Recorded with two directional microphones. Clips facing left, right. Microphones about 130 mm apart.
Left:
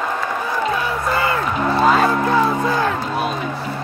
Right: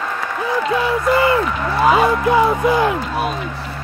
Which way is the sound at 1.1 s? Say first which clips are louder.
Right 5 dB; 25° right (ahead or behind).